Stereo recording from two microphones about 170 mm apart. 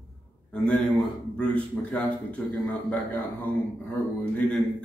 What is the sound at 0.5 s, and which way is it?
Speech, 5° left (ahead or behind).